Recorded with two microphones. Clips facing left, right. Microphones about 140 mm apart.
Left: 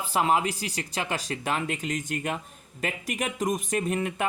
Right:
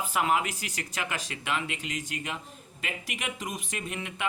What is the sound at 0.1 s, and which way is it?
Speech, 30° left (ahead or behind).